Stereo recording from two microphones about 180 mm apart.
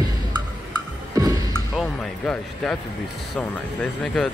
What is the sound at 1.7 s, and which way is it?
Speech, 5° left (ahead or behind).